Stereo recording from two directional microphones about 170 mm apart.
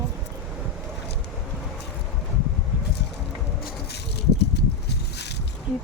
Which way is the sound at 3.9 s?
75° left (ahead or behind).